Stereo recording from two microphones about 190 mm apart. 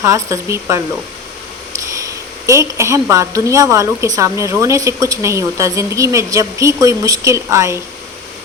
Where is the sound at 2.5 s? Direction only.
15° right (ahead or behind).